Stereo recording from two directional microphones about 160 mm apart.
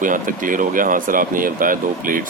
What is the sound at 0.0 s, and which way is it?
Speech, 55° right (ahead or behind).